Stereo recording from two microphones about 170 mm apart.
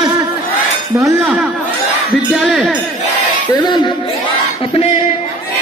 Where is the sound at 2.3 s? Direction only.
Centre (ahead or behind).